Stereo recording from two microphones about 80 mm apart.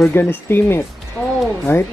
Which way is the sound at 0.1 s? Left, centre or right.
Left.